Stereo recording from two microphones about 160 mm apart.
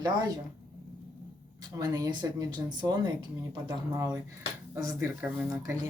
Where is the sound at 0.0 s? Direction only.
25° right (ahead or behind).